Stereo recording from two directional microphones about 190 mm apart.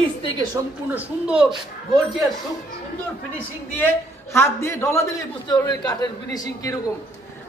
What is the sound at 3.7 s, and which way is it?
A man's voice, 10° left (ahead or behind).